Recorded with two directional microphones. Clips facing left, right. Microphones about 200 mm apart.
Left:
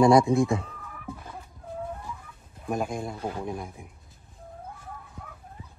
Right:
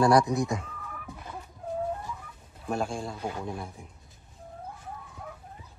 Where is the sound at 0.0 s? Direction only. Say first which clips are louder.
Left 4 dB; 25° left (ahead or behind).